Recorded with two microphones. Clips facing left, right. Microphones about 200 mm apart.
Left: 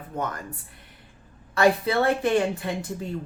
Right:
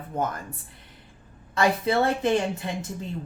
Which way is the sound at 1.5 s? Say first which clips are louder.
Left 2 dB; 20° right (ahead or behind).